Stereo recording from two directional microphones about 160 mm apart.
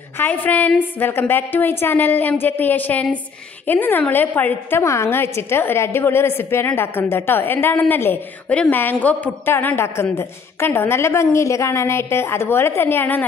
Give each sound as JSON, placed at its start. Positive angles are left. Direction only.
{"t": 0.2, "sound": "a woman's voice", "side_deg": 10}